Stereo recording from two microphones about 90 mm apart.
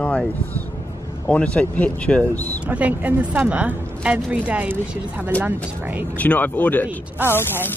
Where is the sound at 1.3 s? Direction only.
15° left (ahead or behind).